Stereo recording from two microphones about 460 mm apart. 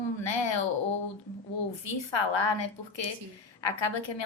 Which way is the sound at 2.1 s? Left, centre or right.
Left.